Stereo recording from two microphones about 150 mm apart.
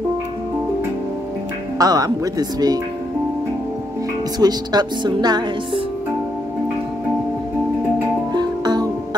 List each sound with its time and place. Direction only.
1.8 s speech: 25° right (ahead or behind)
4.4 s speech: 25° right (ahead or behind)
8.3 s music: 25° right (ahead or behind)